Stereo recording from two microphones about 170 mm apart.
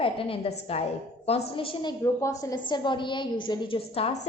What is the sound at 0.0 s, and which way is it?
A woman's voice, 30° left (ahead or behind).